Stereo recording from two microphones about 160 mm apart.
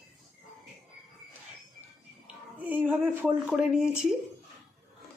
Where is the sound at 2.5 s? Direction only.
10° right (ahead or behind).